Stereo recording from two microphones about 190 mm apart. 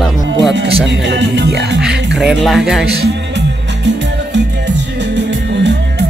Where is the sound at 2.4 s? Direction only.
Centre (ahead or behind).